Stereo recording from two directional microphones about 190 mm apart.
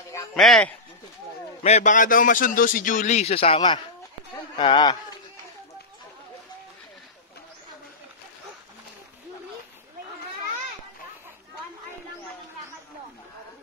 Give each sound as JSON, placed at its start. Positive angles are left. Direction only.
{"t": 0.1, "sound": "speech", "side_deg": 5}
{"t": 1.6, "sound": "a man's voice", "side_deg": 35}